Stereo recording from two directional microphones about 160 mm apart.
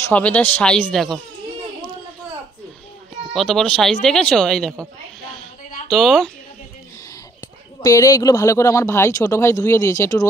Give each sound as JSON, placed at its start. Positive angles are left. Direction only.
{"t": 0.1, "sound": "speech", "side_deg": 10}
{"t": 3.3, "sound": "speech", "side_deg": 0}
{"t": 5.9, "sound": "speech", "side_deg": 0}
{"t": 7.8, "sound": "speech", "side_deg": 20}